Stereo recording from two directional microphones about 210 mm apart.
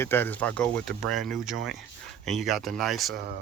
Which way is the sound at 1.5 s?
60° right (ahead or behind).